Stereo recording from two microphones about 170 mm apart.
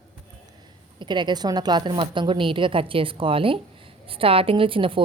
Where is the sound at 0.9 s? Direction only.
25° right (ahead or behind).